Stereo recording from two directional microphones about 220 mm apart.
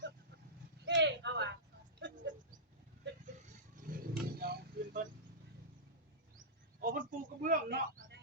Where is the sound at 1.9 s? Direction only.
55° right (ahead or behind).